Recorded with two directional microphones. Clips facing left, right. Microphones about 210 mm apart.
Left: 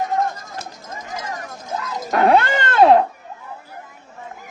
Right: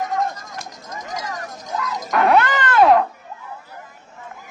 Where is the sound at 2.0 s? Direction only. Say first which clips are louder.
Left 1 dB; 30° left (ahead or behind).